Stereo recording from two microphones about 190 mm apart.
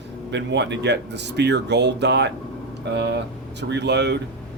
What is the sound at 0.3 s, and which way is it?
Speech, 65° right (ahead or behind).